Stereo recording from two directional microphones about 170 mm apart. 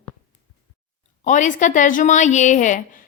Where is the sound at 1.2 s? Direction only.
45° left (ahead or behind).